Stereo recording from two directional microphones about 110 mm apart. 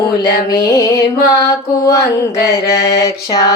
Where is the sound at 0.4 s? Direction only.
30° left (ahead or behind).